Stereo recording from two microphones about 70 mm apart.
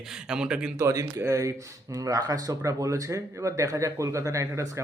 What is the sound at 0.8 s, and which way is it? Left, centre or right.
A man's voice, right.